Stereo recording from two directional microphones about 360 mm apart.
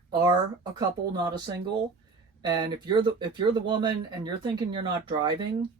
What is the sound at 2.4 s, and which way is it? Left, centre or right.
Speech, centre.